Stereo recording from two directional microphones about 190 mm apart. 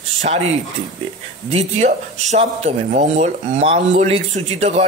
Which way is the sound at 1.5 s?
35° right (ahead or behind).